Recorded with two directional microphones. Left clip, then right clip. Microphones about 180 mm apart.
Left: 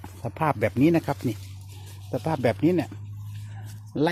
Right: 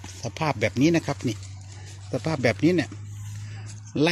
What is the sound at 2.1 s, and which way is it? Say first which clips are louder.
Speech: even; 15° right (ahead or behind).